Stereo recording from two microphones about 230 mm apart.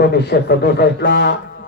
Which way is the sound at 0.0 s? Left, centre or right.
Left.